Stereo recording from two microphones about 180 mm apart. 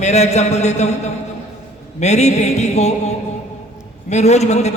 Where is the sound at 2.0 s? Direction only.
40° left (ahead or behind).